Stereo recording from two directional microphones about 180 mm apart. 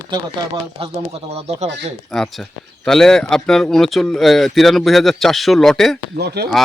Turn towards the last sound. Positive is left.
turn(degrees=-65)  # may be behind; listen again after turning